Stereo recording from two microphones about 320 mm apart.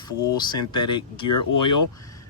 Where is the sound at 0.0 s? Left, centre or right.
Centre.